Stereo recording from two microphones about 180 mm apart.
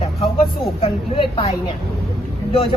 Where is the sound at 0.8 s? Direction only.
30° left (ahead or behind).